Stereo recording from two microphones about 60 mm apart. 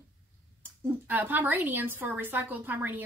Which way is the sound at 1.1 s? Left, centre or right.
Right.